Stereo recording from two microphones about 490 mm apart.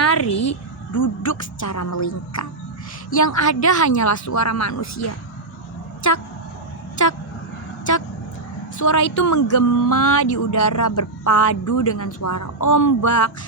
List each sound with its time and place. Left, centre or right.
0.0 s a sound: left
0.9 s speech: left
8.8 s speech: left